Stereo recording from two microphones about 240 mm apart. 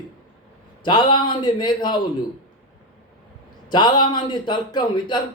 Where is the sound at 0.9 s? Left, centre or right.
Centre.